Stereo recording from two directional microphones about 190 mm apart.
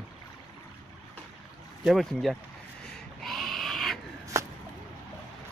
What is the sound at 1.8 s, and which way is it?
Speech, centre (ahead or behind).